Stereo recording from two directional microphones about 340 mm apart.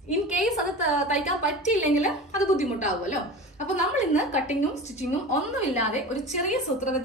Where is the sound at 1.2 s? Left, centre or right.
Left.